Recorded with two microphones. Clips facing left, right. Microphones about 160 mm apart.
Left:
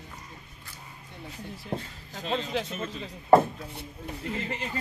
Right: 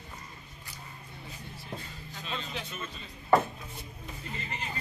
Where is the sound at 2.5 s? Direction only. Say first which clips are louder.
Left 8 dB; 75° left (ahead or behind).